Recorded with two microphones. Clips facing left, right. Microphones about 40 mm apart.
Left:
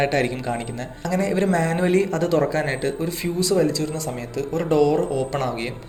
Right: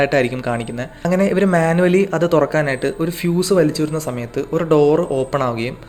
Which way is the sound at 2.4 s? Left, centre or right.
Right.